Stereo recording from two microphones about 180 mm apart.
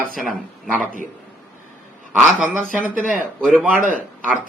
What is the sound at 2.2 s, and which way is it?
Speech, 10° right (ahead or behind).